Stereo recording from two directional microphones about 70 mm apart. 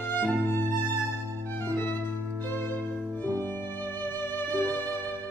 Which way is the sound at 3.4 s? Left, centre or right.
Left.